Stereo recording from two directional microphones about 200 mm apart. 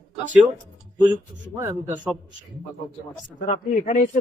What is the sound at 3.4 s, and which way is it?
Speech, 35° left (ahead or behind).